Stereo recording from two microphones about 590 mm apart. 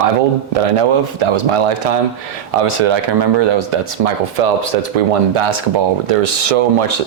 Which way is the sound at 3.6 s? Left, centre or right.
Right.